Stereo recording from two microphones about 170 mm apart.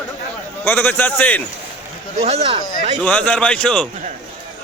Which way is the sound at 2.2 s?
40° right (ahead or behind).